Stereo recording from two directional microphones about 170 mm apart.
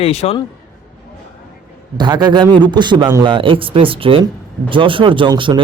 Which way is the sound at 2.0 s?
25° right (ahead or behind).